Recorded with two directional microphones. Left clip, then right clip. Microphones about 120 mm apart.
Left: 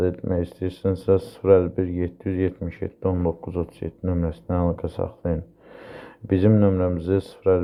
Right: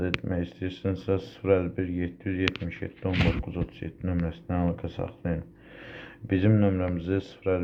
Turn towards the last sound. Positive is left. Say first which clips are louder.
# left 7 dB
turn(degrees=40)  # may be behind; listen again after turning